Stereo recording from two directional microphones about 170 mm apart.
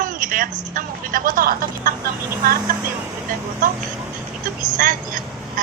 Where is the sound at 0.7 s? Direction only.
50° right (ahead or behind).